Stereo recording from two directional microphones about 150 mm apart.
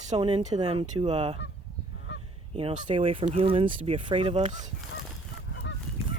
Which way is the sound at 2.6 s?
35° right (ahead or behind).